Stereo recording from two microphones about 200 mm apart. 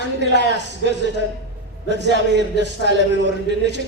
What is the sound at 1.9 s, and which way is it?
A man's voice, 60° right (ahead or behind).